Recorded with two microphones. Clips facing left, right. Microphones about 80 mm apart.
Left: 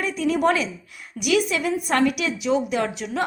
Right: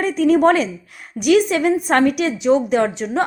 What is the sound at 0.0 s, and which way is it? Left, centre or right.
A woman's voice, right.